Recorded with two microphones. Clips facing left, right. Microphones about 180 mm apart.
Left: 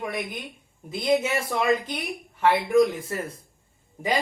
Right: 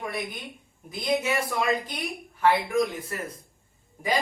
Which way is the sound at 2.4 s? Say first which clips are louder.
Left 4 dB; 25° left (ahead or behind).